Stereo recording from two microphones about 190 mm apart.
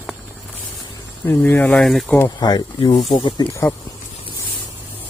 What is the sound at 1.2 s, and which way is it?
Speech, 15° left (ahead or behind).